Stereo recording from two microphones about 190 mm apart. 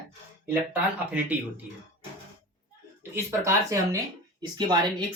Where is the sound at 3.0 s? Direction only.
15° right (ahead or behind).